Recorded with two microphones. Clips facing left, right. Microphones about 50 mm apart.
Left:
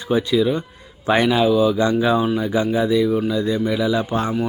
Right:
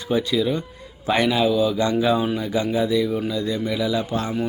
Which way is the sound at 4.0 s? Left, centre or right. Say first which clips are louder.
Left 3 dB; left.